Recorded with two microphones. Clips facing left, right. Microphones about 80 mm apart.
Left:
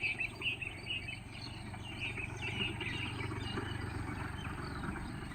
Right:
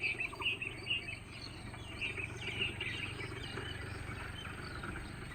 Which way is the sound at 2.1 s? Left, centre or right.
Centre.